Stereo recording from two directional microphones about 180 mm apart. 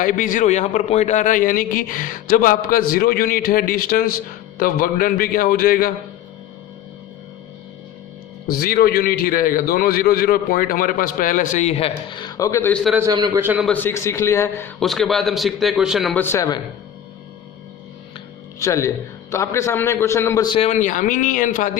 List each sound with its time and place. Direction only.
0.0 s a man's voice: 45° left (ahead or behind)
8.4 s a man's voice: 55° left (ahead or behind)
12.1 s a man's voice: 25° left (ahead or behind)
12.7 s a man's voice: centre (ahead or behind)
13.0 s a man's voice: 20° right (ahead or behind)
13.4 s a man's voice: 10° right (ahead or behind)
13.7 s a man's voice: 10° left (ahead or behind)
14.8 s a man's voice: centre (ahead or behind)
16.1 s a man's voice: 15° left (ahead or behind)
18.6 s a man's voice: 15° left (ahead or behind)
20.7 s a man's voice: 45° left (ahead or behind)